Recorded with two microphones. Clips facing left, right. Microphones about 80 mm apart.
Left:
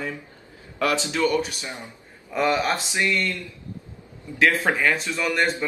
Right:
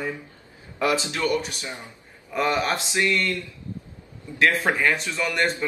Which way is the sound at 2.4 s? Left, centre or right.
Centre.